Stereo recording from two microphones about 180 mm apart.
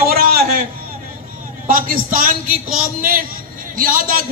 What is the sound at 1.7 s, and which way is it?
A man's voice, 50° right (ahead or behind).